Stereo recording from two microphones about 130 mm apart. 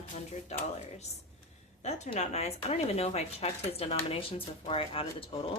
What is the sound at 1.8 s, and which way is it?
Speech, 60° left (ahead or behind).